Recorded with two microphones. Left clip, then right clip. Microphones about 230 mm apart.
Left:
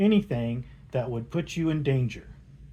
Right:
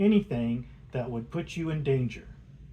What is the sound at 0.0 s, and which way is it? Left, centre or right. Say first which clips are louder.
Speech: left 1 dB; left.